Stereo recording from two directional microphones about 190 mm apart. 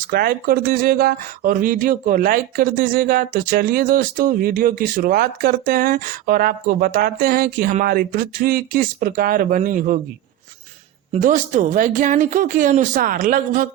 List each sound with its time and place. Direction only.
0.1 s speech: 50° right (ahead or behind)
11.1 s speech: 40° right (ahead or behind)